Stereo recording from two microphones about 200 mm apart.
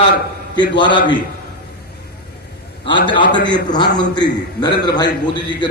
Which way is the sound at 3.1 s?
25° left (ahead or behind).